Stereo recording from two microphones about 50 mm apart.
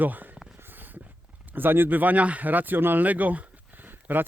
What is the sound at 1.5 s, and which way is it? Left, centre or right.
Speech, right.